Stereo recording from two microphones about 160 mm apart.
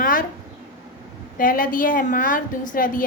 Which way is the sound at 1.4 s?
60° left (ahead or behind).